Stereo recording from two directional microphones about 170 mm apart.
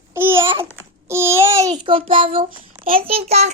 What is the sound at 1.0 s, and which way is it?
Child singing, 15° right (ahead or behind).